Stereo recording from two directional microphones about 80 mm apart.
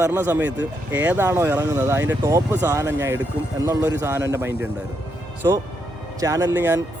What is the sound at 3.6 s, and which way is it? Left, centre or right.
Speech, right.